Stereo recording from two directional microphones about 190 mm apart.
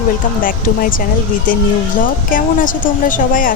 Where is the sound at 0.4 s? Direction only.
45° left (ahead or behind).